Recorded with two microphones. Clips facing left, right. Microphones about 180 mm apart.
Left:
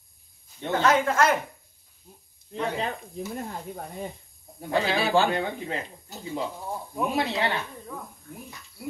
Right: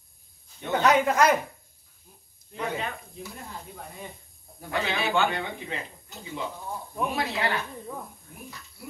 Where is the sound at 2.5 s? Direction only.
30° left (ahead or behind).